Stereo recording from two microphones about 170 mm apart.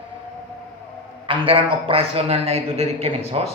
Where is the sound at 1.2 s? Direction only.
30° right (ahead or behind).